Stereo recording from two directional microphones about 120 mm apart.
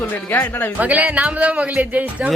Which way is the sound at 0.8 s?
10° right (ahead or behind).